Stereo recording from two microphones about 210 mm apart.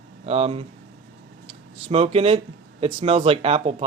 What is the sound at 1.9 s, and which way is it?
Speech, 30° right (ahead or behind).